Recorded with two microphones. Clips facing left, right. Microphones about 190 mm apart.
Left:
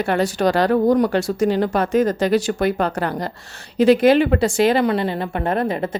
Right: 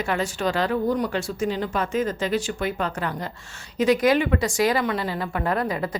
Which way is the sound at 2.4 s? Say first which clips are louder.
Left 7 dB; 40° left (ahead or behind).